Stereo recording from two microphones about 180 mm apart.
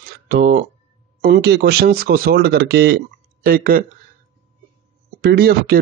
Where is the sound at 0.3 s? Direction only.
50° right (ahead or behind).